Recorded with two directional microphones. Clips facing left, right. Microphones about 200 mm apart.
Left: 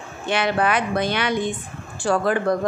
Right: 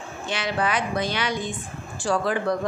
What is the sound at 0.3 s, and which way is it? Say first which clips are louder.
A woman's voice: left 5 dB; 60° left (ahead or behind).